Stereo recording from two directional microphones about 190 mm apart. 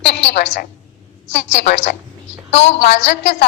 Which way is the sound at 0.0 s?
60° left (ahead or behind).